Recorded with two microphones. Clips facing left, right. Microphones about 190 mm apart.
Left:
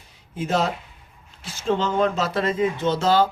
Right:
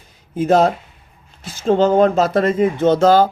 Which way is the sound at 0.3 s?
45° right (ahead or behind).